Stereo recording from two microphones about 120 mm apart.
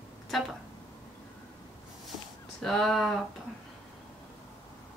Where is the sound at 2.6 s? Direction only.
5° left (ahead or behind).